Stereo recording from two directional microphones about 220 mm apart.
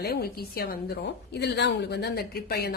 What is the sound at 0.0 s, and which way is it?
A woman's voice, 45° left (ahead or behind).